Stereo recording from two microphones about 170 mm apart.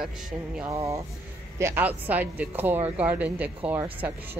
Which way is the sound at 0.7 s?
20° right (ahead or behind).